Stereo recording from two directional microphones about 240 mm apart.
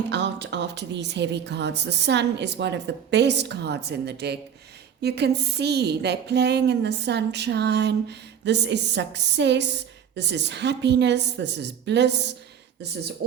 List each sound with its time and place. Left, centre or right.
0.1 s a woman's voice: right